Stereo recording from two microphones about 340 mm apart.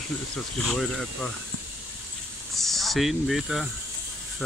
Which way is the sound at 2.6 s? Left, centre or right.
Centre.